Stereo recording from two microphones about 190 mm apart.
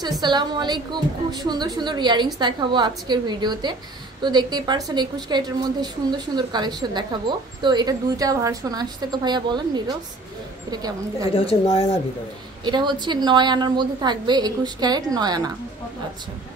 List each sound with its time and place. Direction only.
0.0 s a woman's voice: 20° right (ahead or behind)
11.3 s speech: 30° left (ahead or behind)
12.6 s a woman's voice: 25° right (ahead or behind)